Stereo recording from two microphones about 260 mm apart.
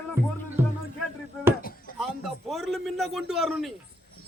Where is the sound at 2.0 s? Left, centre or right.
Centre.